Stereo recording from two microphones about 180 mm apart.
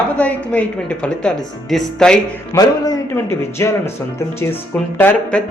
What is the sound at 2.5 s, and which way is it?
A man's voice, 20° left (ahead or behind).